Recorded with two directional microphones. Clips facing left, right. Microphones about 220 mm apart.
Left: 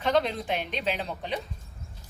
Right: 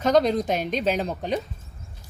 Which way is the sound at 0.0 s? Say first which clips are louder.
Right 6 dB; 40° right (ahead or behind).